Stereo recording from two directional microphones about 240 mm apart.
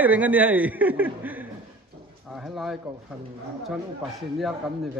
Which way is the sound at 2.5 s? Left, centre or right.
Centre.